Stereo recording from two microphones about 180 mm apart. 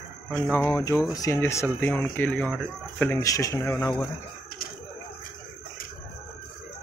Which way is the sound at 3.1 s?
15° left (ahead or behind).